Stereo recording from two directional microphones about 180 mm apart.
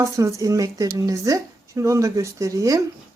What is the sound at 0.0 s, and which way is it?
Speech, 15° right (ahead or behind).